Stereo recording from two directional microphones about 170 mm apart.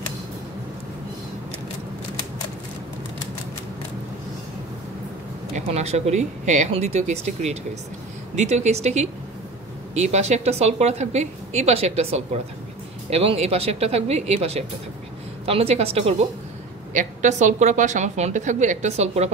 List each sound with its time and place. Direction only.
5.5 s a woman's voice: 40° right (ahead or behind)
16.9 s a woman's voice: 45° right (ahead or behind)